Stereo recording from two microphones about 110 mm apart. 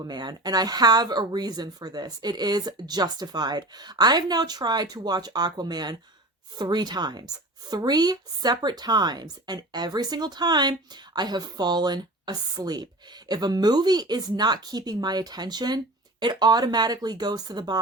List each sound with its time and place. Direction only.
0.0 s speech: 40° right (ahead or behind)